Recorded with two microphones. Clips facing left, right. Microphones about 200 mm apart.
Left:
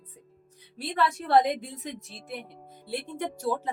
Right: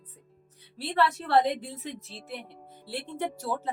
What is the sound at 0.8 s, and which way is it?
A woman's voice, 15° left (ahead or behind).